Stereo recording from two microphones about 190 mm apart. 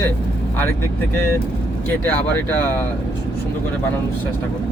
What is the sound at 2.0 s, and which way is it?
Speech, 10° left (ahead or behind).